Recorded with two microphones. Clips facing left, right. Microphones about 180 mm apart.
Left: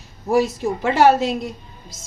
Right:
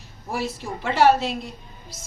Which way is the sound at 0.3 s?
45° left (ahead or behind).